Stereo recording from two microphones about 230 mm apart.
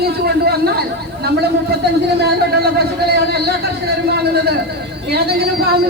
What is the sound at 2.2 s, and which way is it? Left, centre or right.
Speech, right.